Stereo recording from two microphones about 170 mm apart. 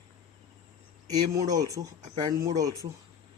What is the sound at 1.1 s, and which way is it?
Speech, 20° right (ahead or behind).